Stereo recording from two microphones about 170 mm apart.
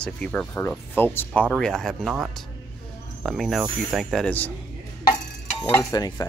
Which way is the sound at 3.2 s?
Centre (ahead or behind).